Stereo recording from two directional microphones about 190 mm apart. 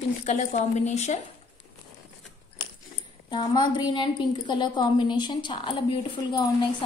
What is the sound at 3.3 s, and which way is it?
A woman's voice, 25° left (ahead or behind).